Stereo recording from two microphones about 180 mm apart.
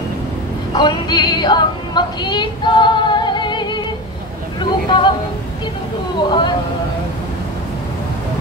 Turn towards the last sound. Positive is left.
turn(degrees=25)  # may be behind; listen again after turning